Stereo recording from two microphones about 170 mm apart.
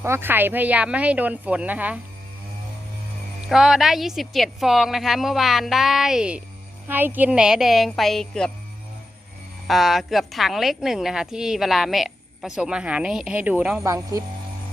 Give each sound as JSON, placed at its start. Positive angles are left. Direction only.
{"t": 0.0, "sound": "speech", "side_deg": -15}
{"t": 3.5, "sound": "a woman's voice", "side_deg": 0}
{"t": 9.6, "sound": "a woman's voice", "side_deg": 0}
{"t": 13.8, "sound": "speech", "side_deg": -20}